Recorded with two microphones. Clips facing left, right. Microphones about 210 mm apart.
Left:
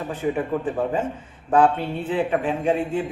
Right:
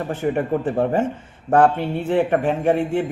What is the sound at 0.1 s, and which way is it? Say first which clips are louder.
Speech: right 2 dB; 70° right (ahead or behind).